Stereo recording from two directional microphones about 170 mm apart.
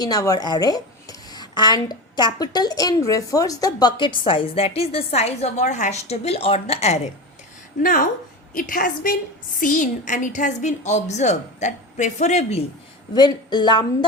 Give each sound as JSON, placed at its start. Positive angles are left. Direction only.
{"t": 0.0, "sound": "a woman's voice", "side_deg": 20}
{"t": 7.8, "sound": "a woman's voice", "side_deg": 55}
{"t": 13.1, "sound": "a woman's voice", "side_deg": 25}